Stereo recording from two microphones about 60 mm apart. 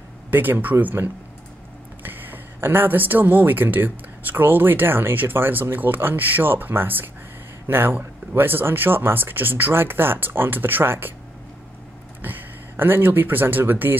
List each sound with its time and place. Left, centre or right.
0.3 s speech: right
12.2 s speech: right